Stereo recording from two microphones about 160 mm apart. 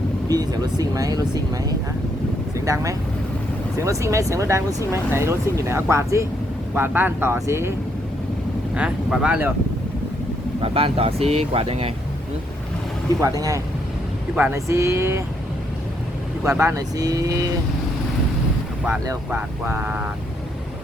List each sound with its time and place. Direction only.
0.3 s speech: 25° right (ahead or behind)
8.7 s speech: 5° right (ahead or behind)
10.6 s speech: 35° right (ahead or behind)
14.3 s speech: 15° right (ahead or behind)
16.4 s speech: 15° right (ahead or behind)
19.3 s speech: 10° right (ahead or behind)